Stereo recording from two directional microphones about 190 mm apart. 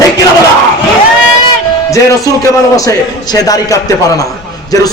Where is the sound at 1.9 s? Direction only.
15° left (ahead or behind).